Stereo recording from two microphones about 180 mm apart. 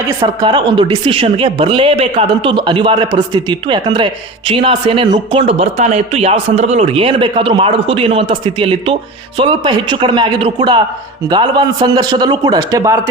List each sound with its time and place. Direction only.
0.2 s a man's voice: 25° right (ahead or behind)